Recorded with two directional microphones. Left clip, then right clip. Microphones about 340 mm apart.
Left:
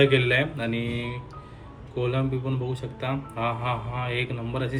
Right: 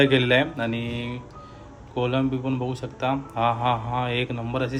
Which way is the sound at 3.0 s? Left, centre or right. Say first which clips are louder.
Right 6 dB; centre.